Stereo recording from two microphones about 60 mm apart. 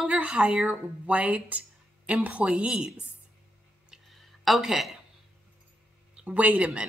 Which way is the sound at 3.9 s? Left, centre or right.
Centre.